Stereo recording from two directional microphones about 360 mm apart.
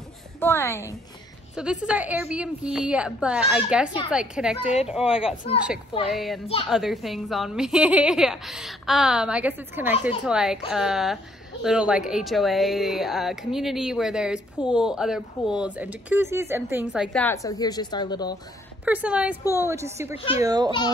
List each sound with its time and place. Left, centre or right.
0.4 s a woman's voice: centre
6.4 s a woman's voice: centre
6.7 s speech: centre
18.9 s a woman's voice: centre